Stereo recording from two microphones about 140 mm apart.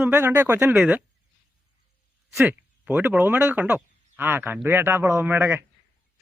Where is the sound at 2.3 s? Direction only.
10° right (ahead or behind).